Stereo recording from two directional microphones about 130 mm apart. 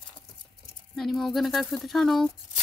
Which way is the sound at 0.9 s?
Centre (ahead or behind).